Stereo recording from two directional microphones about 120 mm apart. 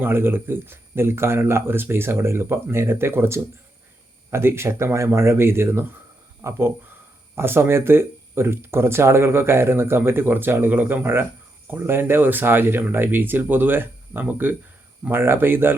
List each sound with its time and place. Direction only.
0.0 s speech: 20° right (ahead or behind)